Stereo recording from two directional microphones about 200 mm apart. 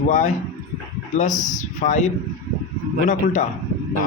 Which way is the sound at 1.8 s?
35° left (ahead or behind).